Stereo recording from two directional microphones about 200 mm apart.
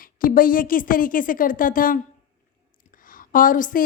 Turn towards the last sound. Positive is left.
turn(degrees=40)  # may be behind; listen again after turning